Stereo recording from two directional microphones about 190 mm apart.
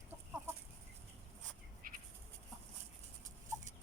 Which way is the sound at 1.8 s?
45° right (ahead or behind).